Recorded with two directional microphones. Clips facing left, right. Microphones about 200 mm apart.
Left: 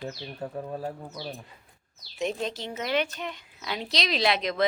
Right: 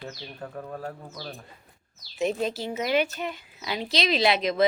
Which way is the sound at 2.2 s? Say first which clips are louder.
Right 3 dB; 5° right (ahead or behind).